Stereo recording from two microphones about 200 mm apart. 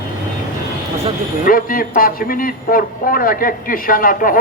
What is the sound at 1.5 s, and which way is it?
A man's voice, 45° left (ahead or behind).